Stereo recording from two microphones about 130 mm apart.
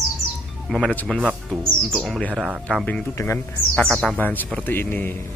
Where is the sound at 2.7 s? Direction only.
10° left (ahead or behind).